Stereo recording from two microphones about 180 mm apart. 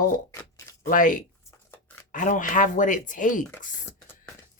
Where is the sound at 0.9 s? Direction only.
50° left (ahead or behind).